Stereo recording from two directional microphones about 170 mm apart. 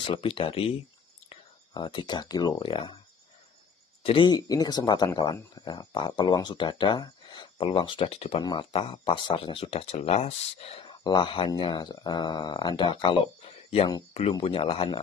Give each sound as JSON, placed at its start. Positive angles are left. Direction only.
{"t": 0.0, "sound": "speech", "side_deg": 30}
{"t": 4.0, "sound": "speech", "side_deg": 30}